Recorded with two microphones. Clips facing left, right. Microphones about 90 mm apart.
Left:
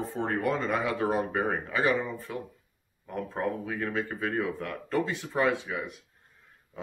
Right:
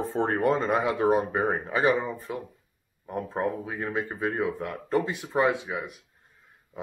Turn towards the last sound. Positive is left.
turn(degrees=-20)  # may be behind; listen again after turning